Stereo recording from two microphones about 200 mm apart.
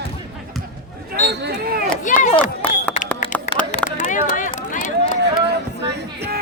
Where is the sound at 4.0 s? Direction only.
40° left (ahead or behind).